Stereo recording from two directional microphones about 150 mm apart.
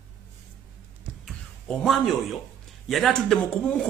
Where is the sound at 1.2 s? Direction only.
Centre (ahead or behind).